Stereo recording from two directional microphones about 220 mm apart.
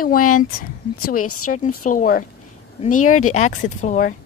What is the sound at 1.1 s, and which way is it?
Speech, 85° left.